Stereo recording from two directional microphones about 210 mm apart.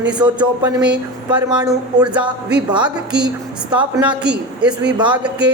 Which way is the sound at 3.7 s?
5° right (ahead or behind).